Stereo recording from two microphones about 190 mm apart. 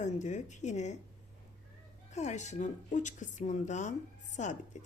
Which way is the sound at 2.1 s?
40° left (ahead or behind).